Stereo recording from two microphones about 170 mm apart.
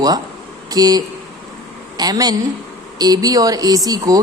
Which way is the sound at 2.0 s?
25° right (ahead or behind).